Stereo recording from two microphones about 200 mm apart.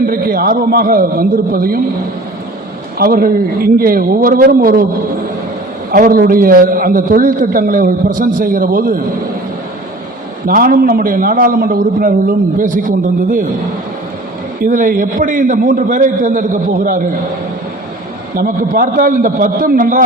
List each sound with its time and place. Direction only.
0.0 s a man's voice: 45° right (ahead or behind)
3.0 s a man's voice: 45° right (ahead or behind)
5.9 s a man's voice: 45° right (ahead or behind)
10.4 s a man's voice: 45° right (ahead or behind)
14.6 s a man's voice: 45° right (ahead or behind)
18.3 s a man's voice: 45° right (ahead or behind)